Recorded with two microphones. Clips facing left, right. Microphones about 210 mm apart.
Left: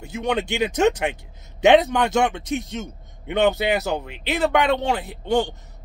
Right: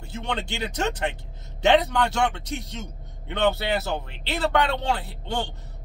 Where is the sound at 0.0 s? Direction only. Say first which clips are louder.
Left 7 dB; 15° left (ahead or behind).